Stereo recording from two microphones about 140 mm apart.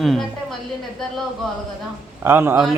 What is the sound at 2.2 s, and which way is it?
Speech, 15° right (ahead or behind).